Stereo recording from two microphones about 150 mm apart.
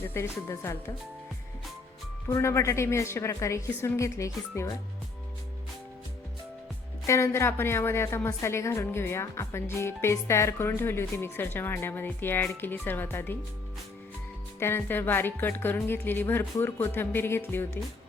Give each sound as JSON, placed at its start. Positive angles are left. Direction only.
{"t": 0.1, "sound": "a woman's voice", "side_deg": 15}
{"t": 2.3, "sound": "a woman's voice", "side_deg": 20}
{"t": 7.1, "sound": "a woman's voice", "side_deg": 15}
{"t": 14.6, "sound": "a woman's voice", "side_deg": 15}